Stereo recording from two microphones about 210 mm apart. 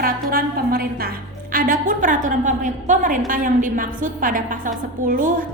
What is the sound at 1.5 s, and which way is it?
A woman's voice, 40° right (ahead or behind).